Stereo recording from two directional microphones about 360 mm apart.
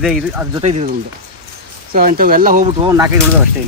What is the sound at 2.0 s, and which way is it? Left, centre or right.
Speech, right.